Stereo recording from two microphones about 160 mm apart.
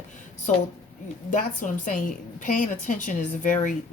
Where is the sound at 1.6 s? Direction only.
55° left (ahead or behind).